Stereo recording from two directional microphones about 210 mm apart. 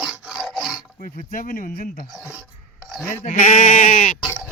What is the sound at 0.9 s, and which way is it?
Speech, 40° left (ahead or behind).